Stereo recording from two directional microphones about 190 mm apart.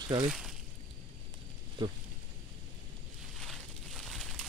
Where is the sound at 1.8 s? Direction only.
25° right (ahead or behind).